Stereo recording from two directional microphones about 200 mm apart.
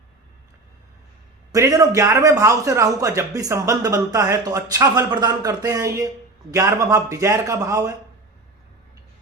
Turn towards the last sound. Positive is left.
turn(degrees=-15)  # may be behind; listen again after turning